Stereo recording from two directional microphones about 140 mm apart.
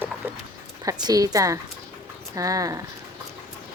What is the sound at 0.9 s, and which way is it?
A woman's voice, 25° right (ahead or behind).